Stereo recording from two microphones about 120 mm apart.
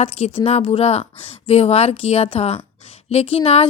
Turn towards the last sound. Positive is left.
turn(degrees=50)  # may be behind; listen again after turning